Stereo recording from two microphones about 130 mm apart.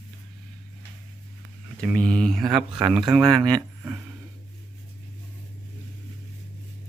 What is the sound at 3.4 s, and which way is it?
Speech, 30° right (ahead or behind).